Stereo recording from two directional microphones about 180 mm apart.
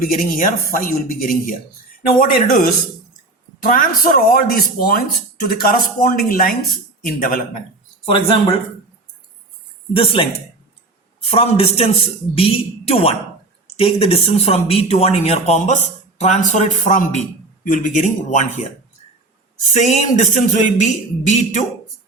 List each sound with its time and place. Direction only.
0.0 s speech: 50° left (ahead or behind)
9.9 s speech: 30° left (ahead or behind)
11.3 s speech: 30° left (ahead or behind)
19.7 s speech: 40° left (ahead or behind)